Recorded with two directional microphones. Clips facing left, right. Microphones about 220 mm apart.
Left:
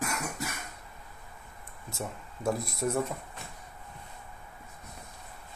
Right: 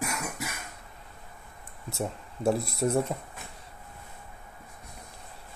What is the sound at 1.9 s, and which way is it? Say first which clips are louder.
Speech: right 5 dB; 30° right (ahead or behind).